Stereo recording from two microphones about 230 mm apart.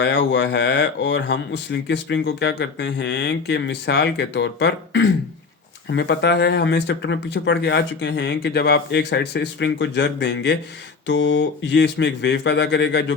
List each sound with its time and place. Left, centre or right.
0.0 s speech: left